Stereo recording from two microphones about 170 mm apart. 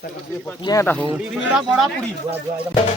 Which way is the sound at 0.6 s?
20° left (ahead or behind).